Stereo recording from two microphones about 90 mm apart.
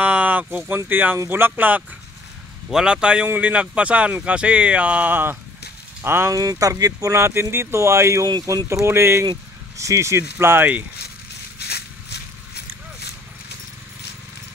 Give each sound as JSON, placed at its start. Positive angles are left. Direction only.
{"t": 0.0, "sound": "speech", "side_deg": -15}
{"t": 2.7, "sound": "speech", "side_deg": -10}
{"t": 6.3, "sound": "speech", "side_deg": -40}